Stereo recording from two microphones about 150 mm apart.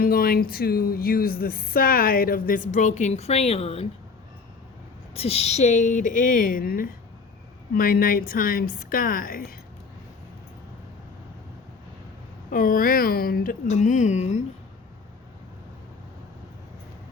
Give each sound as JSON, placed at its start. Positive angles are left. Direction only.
{"t": 0.0, "sound": "speech", "side_deg": 80}
{"t": 5.1, "sound": "a woman's voice", "side_deg": 40}
{"t": 12.5, "sound": "speech", "side_deg": 70}